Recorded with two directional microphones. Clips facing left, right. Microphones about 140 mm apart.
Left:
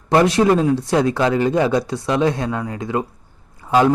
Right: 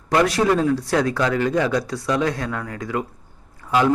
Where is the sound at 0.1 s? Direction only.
25° left (ahead or behind).